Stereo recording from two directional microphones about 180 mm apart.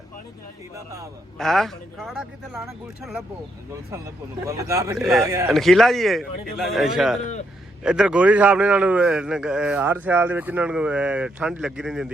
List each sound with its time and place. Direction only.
1.4 s a man's voice: centre (ahead or behind)
4.4 s a man's voice: 15° right (ahead or behind)
4.9 s a man's voice: centre (ahead or behind)
5.2 s a man's voice: 15° right (ahead or behind)
5.5 s a man's voice: centre (ahead or behind)